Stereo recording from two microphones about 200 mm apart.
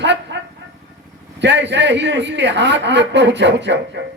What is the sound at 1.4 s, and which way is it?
Speech, 60° right (ahead or behind).